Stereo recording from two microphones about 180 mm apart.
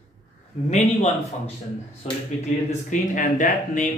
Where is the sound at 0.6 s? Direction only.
40° left (ahead or behind).